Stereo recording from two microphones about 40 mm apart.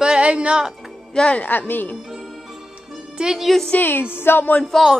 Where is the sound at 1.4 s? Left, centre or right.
Left.